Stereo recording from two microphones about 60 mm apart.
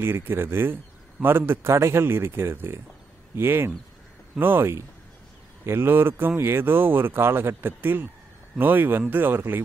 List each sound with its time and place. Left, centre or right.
0.0 s a man's voice: right